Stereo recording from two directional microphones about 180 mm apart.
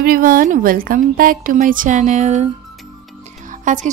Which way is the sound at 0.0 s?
50° right (ahead or behind).